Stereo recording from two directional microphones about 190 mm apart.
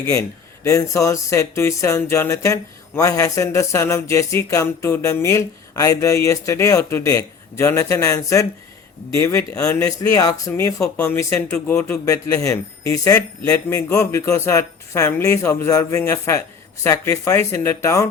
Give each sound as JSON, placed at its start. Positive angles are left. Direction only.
{"t": 0.0, "sound": "speech", "side_deg": 15}
{"t": 12.0, "sound": "speech", "side_deg": 15}